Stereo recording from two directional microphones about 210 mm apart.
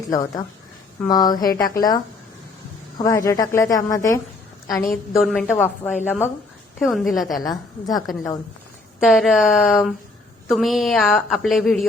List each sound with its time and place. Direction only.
0.1 s speech: 15° left (ahead or behind)
3.0 s speech: 15° left (ahead or behind)
5.1 s a woman's voice: centre (ahead or behind)
7.4 s speech: 20° left (ahead or behind)
9.0 s a woman's voice: centre (ahead or behind)